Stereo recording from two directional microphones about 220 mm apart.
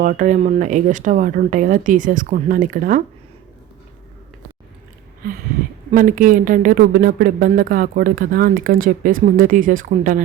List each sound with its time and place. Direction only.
0.0 s speech: 35° right (ahead or behind)
5.9 s speech: 35° right (ahead or behind)